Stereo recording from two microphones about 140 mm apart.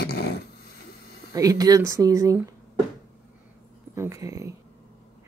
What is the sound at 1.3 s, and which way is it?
Speech, 25° right (ahead or behind).